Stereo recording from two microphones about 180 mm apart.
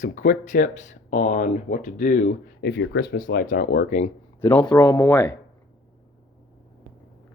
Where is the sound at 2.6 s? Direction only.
80° left; by 4.1 s 45° left (ahead or behind).